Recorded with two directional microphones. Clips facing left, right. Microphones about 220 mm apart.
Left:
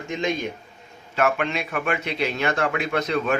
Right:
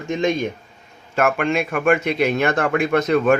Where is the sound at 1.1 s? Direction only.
50° right (ahead or behind).